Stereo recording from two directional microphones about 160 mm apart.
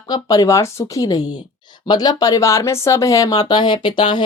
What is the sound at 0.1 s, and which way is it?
Speech, 20° left (ahead or behind).